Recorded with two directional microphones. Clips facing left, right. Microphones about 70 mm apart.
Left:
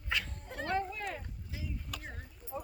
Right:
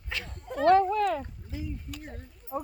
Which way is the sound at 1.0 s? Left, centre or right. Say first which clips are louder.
Right 13 dB; right.